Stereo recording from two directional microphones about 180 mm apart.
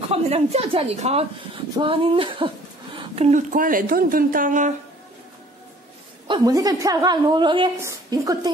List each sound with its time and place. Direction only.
0.1 s a woman's voice: 35° right (ahead or behind)
6.2 s a woman's voice: 25° right (ahead or behind)